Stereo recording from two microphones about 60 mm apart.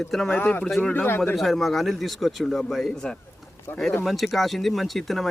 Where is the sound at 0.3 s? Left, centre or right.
Left.